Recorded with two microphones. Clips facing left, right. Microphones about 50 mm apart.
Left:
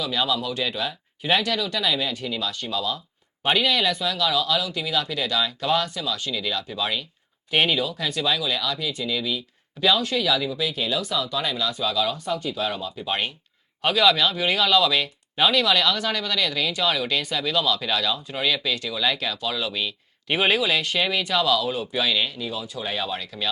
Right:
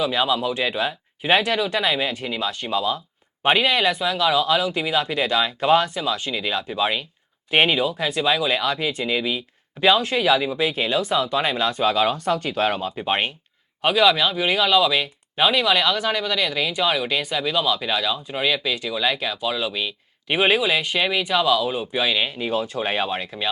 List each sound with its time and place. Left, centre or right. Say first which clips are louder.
0.0 s speech: right 4 dB; right
13.8 s speech: right 2 dB; centre
22.4 s speech: right 7 dB; right